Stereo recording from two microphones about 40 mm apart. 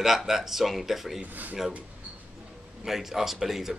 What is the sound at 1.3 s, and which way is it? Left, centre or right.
Speech, right.